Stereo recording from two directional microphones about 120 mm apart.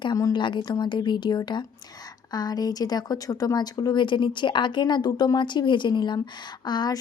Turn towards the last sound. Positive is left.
turn(degrees=35)  # may be behind; listen again after turning